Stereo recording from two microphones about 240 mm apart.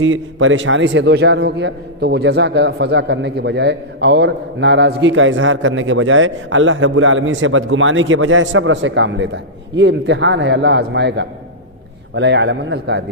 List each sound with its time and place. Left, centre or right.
0.0 s a man's voice: right